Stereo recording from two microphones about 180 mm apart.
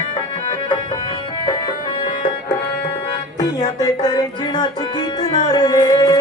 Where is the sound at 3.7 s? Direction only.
20° left (ahead or behind).